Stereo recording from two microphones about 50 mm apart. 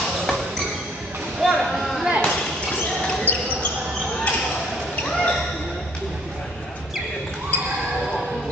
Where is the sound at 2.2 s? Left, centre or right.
Centre.